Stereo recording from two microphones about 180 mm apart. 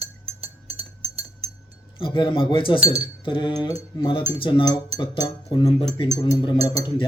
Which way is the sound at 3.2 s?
25° left (ahead or behind).